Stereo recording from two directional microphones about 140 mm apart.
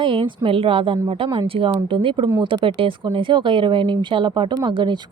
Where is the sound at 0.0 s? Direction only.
40° right (ahead or behind).